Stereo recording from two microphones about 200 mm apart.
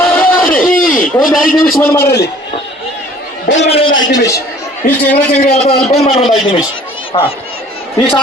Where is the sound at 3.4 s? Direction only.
65° left (ahead or behind).